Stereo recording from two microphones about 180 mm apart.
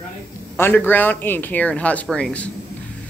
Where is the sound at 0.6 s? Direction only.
10° left (ahead or behind).